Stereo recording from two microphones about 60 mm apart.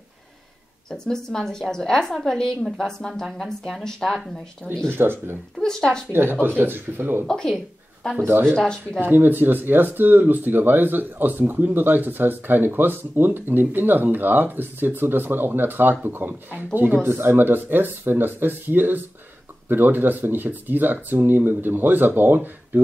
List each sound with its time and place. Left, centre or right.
0.8 s a woman's voice: centre
4.8 s speech: right
5.6 s a woman's voice: centre
6.4 s speech: right
7.2 s a woman's voice: centre
8.3 s speech: right
8.5 s a woman's voice: centre
9.0 s speech: right